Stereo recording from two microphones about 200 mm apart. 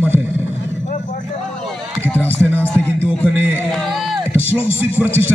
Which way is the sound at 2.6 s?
10° left (ahead or behind).